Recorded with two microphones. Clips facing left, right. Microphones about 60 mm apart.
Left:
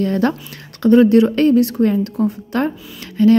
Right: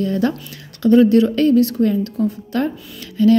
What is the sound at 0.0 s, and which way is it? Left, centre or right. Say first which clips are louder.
Speech: left 2 dB; left.